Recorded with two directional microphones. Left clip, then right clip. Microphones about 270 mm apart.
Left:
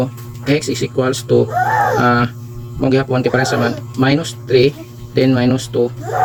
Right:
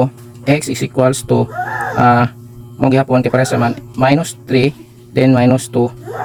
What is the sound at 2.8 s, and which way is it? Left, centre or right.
Speech, right.